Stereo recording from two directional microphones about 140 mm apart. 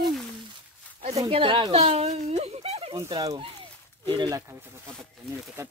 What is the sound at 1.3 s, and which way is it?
Speech, 40° right (ahead or behind).